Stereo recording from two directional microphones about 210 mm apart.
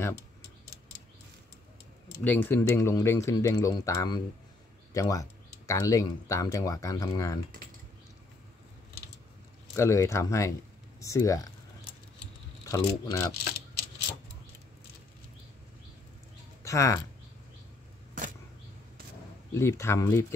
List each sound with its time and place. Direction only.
2.2 s speech: 10° left (ahead or behind)
9.8 s speech: 15° left (ahead or behind)
12.6 s speech: 15° left (ahead or behind)
16.6 s speech: 15° left (ahead or behind)
19.5 s speech: 15° left (ahead or behind)